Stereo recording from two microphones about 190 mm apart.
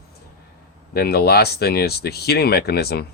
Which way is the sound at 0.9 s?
55° left (ahead or behind).